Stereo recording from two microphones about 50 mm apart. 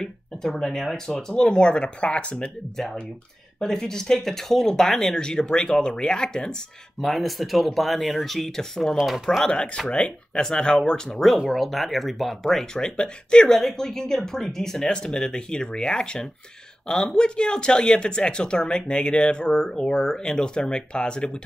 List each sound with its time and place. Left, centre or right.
0.0 s speech: centre
2.8 s speech: centre
7.0 s speech: centre
8.9 s speech: centre
9.8 s speech: left
11.5 s speech: centre
12.7 s speech: centre